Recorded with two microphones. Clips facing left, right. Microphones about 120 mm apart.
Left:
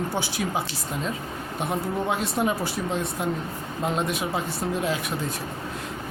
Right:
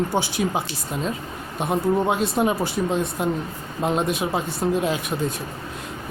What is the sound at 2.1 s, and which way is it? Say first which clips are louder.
Speech: right 4 dB; 20° right (ahead or behind).